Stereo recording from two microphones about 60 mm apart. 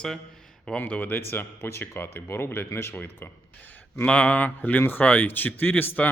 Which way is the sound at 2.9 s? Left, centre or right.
Left.